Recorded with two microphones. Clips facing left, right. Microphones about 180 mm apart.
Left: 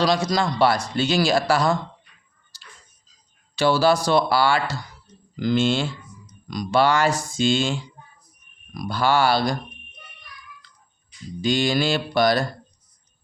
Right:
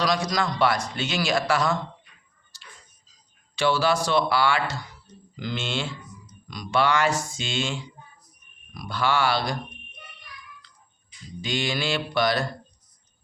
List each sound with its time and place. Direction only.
0.0 s a man's voice: 30° left (ahead or behind)
2.5 s tick-tock: 35° left (ahead or behind)
3.5 s a man's voice: 40° left (ahead or behind)
11.4 s a man's voice: 40° left (ahead or behind)